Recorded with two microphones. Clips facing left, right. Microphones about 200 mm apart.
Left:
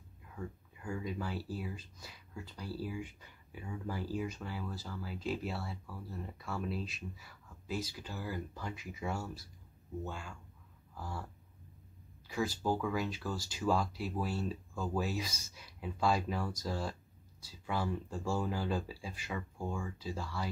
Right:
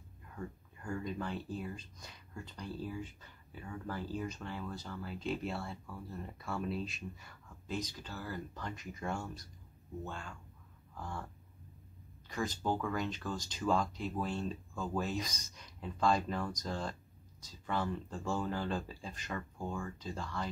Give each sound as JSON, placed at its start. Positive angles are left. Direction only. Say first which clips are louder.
{"t": 0.4, "sound": "speech", "louder": "even", "side_deg": 5}
{"t": 12.3, "sound": "speech", "louder": "left 2 dB", "side_deg": 5}